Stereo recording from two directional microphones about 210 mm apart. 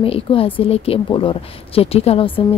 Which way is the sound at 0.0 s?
25° left (ahead or behind).